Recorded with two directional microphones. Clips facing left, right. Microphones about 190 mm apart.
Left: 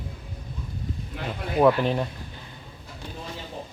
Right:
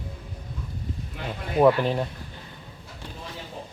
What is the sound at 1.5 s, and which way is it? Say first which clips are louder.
Speech: right 1 dB; 5° right (ahead or behind).